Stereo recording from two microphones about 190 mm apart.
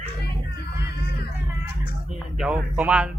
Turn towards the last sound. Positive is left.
turn(degrees=-5)  # may be behind; listen again after turning